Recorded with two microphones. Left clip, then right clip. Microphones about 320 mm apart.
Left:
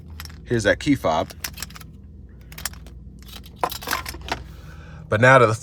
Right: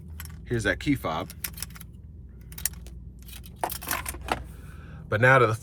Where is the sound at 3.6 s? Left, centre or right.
Centre.